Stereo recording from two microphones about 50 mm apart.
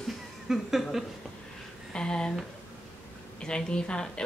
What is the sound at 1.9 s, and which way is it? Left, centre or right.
Speech, centre.